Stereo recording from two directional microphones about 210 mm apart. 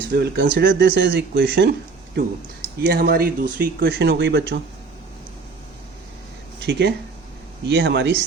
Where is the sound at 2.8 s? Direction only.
45° right (ahead or behind).